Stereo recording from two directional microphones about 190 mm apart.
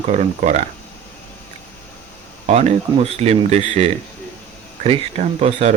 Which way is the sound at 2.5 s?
35° right (ahead or behind).